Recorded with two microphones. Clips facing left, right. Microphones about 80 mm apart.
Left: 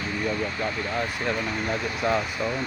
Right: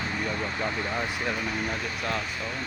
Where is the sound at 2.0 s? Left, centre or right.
Centre.